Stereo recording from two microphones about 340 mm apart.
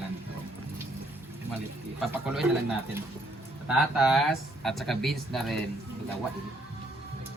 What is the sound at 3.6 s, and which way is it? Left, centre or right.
A woman's voice, centre.